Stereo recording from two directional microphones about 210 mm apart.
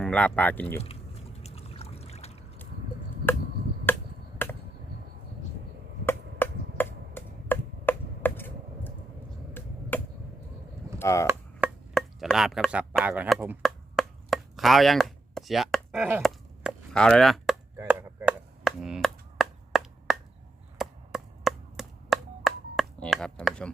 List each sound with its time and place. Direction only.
0.0 s speech: 5° left (ahead or behind)
1.4 s trickle: 30° left (ahead or behind)
3.9 s finger snapping: 10° left (ahead or behind)
4.4 s chop: 10° left (ahead or behind)
6.1 s chop: 10° left (ahead or behind)
9.9 s chop: 10° left (ahead or behind)
11.0 s speech: 15° left (ahead or behind)
11.9 s chopping: centre (ahead or behind)
16.2 s chop: 5° left (ahead or behind)